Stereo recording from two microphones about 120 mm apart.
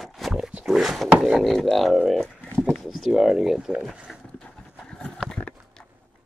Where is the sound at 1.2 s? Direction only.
Centre (ahead or behind).